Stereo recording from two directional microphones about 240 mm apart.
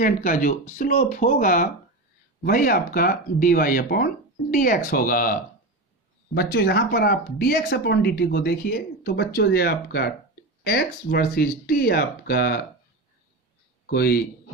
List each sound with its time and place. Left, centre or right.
0.0 s speech: left
13.8 s speech: left